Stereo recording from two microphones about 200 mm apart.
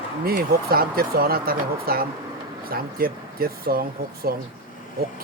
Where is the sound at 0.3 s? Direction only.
50° right (ahead or behind).